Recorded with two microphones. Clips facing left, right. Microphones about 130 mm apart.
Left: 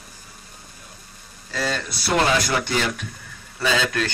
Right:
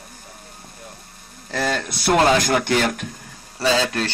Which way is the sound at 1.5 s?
55° right (ahead or behind).